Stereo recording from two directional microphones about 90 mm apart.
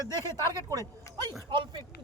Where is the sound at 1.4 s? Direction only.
65° right (ahead or behind).